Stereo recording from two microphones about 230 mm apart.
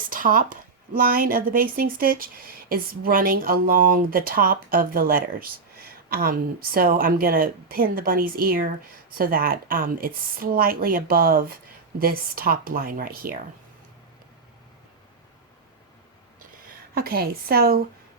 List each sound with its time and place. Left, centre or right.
0.1 s speech: right
16.9 s speech: right